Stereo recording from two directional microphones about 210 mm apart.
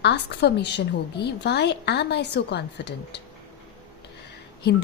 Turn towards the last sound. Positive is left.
turn(degrees=50)  # may be behind; listen again after turning